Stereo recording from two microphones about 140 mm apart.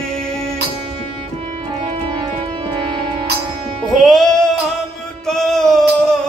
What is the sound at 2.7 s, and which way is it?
Music, 35° right (ahead or behind).